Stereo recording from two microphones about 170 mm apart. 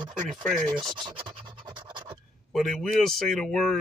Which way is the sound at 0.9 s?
30° right (ahead or behind).